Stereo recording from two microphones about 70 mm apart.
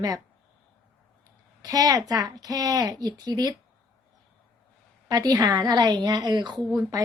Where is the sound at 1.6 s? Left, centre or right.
Right.